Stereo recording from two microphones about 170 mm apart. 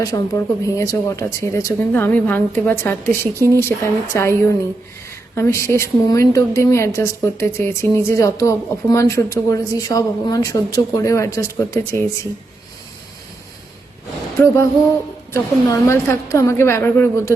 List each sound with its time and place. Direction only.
0.0 s speech: 20° left (ahead or behind)
3.3 s speech: 20° right (ahead or behind)
3.6 s speech: 15° left (ahead or behind)
14.4 s speech: 15° left (ahead or behind)